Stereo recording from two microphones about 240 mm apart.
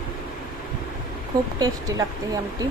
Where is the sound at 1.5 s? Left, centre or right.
Centre.